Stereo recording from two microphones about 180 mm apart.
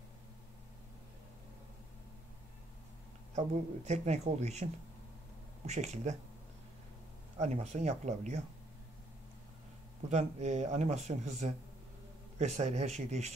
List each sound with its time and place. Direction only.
3.3 s speech: 40° right (ahead or behind)
5.7 s speech: 40° right (ahead or behind)
7.3 s speech: 40° right (ahead or behind)
10.0 s speech: 40° right (ahead or behind)